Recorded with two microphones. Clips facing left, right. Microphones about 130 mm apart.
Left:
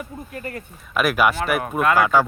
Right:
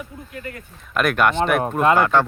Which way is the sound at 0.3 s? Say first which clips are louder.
Left 2 dB; 40° left (ahead or behind).